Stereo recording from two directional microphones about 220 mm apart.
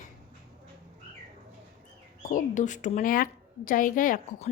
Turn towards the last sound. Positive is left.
turn(degrees=40)  # may be behind; listen again after turning